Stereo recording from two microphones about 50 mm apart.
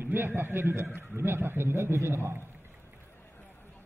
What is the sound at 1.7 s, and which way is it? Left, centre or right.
Speech, right.